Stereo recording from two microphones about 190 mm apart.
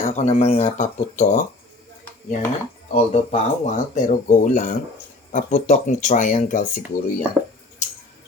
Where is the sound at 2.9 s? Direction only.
35° left (ahead or behind).